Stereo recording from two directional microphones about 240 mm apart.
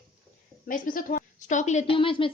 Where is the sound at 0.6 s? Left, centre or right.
Left.